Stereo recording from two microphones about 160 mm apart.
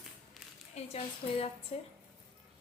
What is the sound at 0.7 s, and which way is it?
Speech, 40° left (ahead or behind).